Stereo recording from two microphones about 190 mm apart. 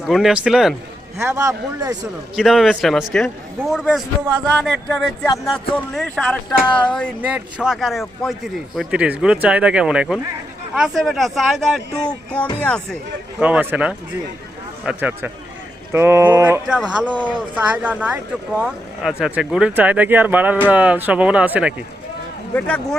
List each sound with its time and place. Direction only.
0.1 s speech: centre (ahead or behind)
1.2 s speech: 15° right (ahead or behind)
2.3 s speech: centre (ahead or behind)
5.2 s speech: 20° left (ahead or behind)
5.7 s speech: 5° left (ahead or behind)
7.2 s speech: 5° right (ahead or behind)
13.4 s speech: 10° right (ahead or behind)
22.5 s speech: 5° left (ahead or behind)